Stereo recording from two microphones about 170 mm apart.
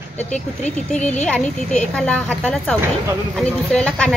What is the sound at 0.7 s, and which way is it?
A woman's voice, 5° left (ahead or behind).